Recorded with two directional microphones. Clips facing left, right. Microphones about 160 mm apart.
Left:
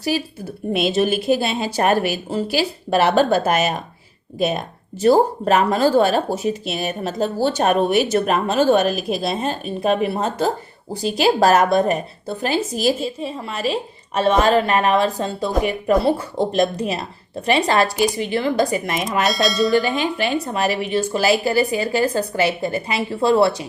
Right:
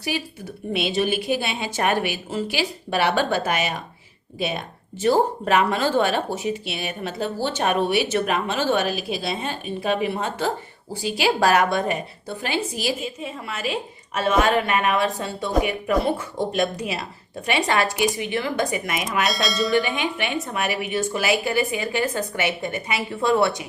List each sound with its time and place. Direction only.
0.7 s speech: 45° left (ahead or behind)
19.2 s speech: centre (ahead or behind)
20.0 s speech: 35° left (ahead or behind)